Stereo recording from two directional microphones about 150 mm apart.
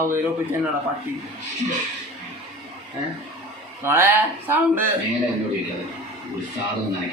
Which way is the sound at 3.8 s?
15° right (ahead or behind).